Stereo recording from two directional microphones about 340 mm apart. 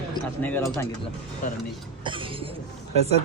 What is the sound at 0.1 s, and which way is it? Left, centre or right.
Speech, centre.